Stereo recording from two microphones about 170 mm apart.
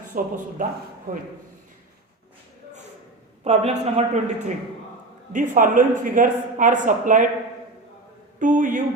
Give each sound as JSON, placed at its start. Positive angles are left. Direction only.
{"t": 0.1, "sound": "speech", "side_deg": -55}
{"t": 3.4, "sound": "a woman's voice", "side_deg": -40}
{"t": 8.4, "sound": "speech", "side_deg": -50}